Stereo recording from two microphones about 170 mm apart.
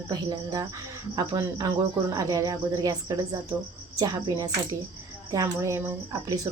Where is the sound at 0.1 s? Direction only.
25° right (ahead or behind).